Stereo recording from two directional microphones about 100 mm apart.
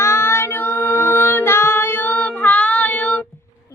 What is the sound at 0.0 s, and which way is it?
Female singing, 25° left (ahead or behind).